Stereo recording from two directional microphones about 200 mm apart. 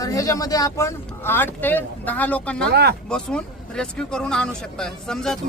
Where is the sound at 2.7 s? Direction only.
55° right (ahead or behind).